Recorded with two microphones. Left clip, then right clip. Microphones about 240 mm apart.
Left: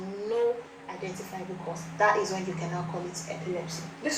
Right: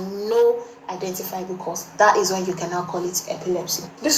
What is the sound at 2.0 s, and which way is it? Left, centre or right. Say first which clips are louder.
A woman's voice: right 8 dB; right.